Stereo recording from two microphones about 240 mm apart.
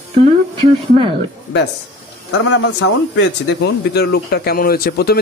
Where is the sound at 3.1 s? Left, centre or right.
Left.